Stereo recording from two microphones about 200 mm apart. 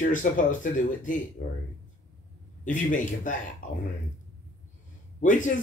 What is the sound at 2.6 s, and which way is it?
Speech, 40° left (ahead or behind).